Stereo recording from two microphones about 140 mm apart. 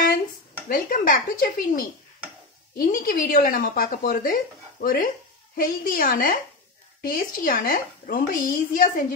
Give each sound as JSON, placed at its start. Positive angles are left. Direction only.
{"t": 0.7, "sound": "speech", "side_deg": 80}